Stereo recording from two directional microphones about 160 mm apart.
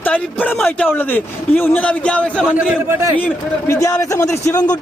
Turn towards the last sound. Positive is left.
turn(degrees=25)  # may be behind; listen again after turning